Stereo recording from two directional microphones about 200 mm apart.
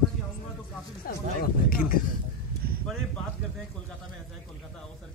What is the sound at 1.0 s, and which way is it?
Speech, 45° left (ahead or behind).